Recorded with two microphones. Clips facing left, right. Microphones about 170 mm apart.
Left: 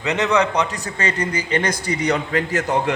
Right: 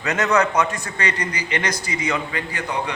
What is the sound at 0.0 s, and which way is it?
A man's voice, 15° left (ahead or behind).